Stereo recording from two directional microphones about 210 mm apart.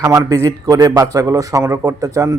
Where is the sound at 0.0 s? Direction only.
15° right (ahead or behind).